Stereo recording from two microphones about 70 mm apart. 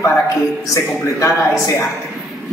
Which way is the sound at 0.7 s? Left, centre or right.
Left.